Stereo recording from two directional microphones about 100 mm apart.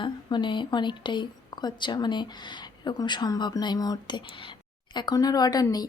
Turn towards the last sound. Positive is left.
turn(degrees=40)  # may be behind; listen again after turning